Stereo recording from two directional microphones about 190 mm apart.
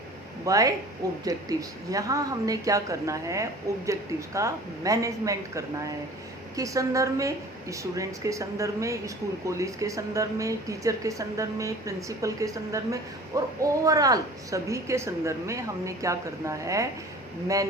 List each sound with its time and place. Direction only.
0.4 s a woman's voice: 15° right (ahead or behind)